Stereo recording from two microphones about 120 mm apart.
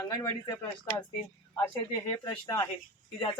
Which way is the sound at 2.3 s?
35° left (ahead or behind).